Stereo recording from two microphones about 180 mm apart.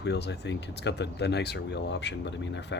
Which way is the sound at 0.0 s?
70° left (ahead or behind).